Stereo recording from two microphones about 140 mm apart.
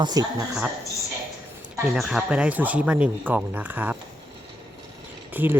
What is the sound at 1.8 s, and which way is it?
Speech, centre (ahead or behind).